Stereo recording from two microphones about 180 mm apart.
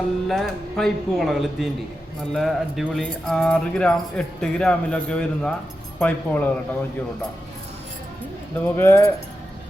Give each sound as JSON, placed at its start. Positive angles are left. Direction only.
{"t": 0.3, "sound": "speech", "side_deg": 0}
{"t": 8.6, "sound": "speech", "side_deg": 10}